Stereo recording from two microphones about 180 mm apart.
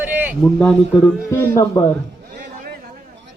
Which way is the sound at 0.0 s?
10° right (ahead or behind).